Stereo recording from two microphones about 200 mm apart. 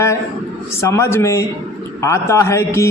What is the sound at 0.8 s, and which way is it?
Speech, 15° left (ahead or behind).